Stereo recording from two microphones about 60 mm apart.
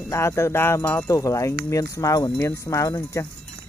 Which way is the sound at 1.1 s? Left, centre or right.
Left.